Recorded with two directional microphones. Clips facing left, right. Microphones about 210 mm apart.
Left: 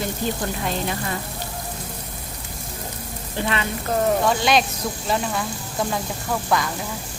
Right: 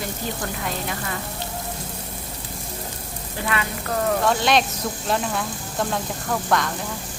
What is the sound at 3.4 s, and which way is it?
Speech, 25° left (ahead or behind).